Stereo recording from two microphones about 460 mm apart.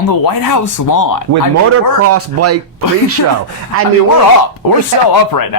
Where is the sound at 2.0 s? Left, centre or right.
Right.